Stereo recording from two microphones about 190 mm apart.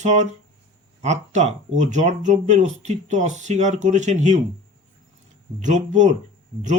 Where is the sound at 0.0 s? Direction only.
35° right (ahead or behind).